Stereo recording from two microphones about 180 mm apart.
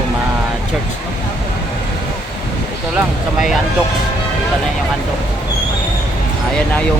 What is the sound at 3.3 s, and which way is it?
Speech, centre (ahead or behind).